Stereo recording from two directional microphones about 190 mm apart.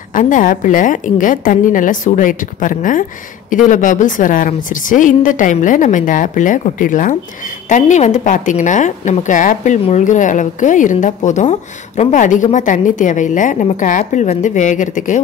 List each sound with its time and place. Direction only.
0.1 s a woman's voice: 45° left (ahead or behind)